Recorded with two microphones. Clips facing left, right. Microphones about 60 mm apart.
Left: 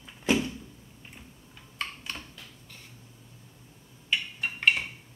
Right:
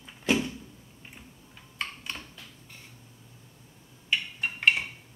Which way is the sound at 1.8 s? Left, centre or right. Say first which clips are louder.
Even; centre.